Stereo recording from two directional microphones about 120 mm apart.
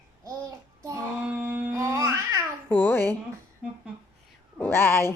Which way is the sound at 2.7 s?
20° left (ahead or behind).